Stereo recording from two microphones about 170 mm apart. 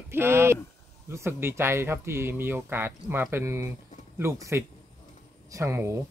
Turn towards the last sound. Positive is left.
turn(degrees=-15)  # may be behind; listen again after turning